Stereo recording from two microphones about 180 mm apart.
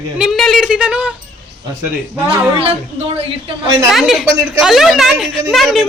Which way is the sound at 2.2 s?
35° right (ahead or behind).